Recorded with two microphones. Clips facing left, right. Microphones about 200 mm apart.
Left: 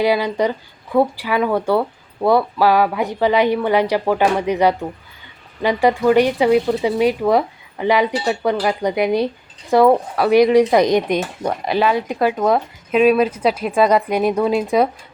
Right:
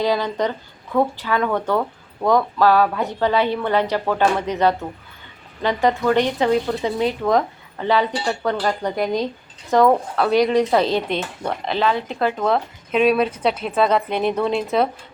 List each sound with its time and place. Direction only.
0.0 s speech: 10° left (ahead or behind)